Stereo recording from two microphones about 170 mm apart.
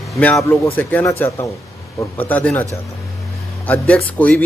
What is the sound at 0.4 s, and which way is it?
Speech, 20° left (ahead or behind).